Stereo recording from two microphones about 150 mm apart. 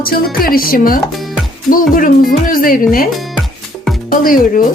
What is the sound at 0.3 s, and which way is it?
Speech, 75° left (ahead or behind).